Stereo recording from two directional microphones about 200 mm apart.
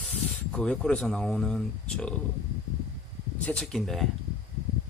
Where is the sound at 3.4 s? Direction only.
5° left (ahead or behind).